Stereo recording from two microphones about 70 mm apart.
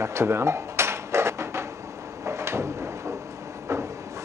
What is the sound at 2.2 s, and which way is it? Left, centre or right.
Drawer open or close, right.